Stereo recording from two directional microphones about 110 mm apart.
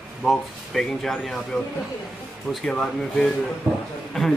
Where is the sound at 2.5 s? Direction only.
5° left (ahead or behind).